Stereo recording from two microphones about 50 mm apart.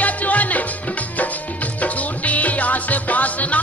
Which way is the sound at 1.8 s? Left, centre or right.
Left.